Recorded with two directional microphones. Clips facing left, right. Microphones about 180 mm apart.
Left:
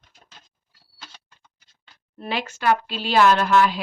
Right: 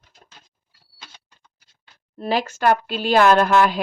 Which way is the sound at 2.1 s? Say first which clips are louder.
Right 6 dB; 40° right (ahead or behind).